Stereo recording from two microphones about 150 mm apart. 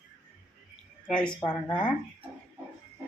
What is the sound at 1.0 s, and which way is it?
Speech, 5° left (ahead or behind).